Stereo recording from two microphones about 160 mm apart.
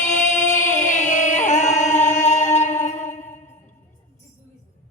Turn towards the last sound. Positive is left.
turn(degrees=50)  # may be behind; listen again after turning